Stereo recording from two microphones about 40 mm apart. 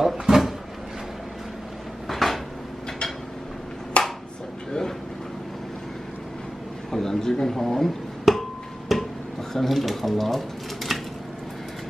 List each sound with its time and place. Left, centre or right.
0.0 s cupboard open or close: centre
2.0 s cupboard open or close: centre
3.9 s a sound: left
6.9 s a man's voice: centre
8.3 s music: centre
9.5 s speech: centre